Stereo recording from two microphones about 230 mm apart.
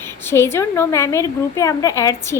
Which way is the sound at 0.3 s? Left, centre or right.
Centre.